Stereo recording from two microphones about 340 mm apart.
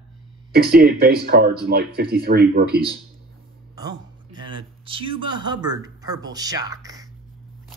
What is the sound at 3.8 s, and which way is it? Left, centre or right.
Speech, centre.